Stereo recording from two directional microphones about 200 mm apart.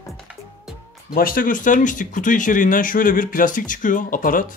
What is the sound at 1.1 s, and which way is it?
Speech, 45° left (ahead or behind).